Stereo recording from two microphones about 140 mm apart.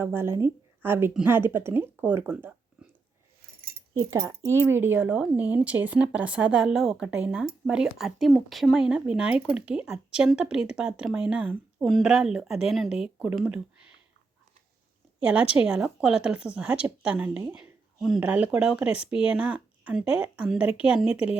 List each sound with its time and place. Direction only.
0.0 s speech: 15° right (ahead or behind)
4.0 s speech: 25° right (ahead or behind); by 13.6 s 10° right (ahead or behind)
15.2 s speech: 10° right (ahead or behind)
17.5 s a sound: 5° right (ahead or behind)
18.3 s speech: 10° right (ahead or behind)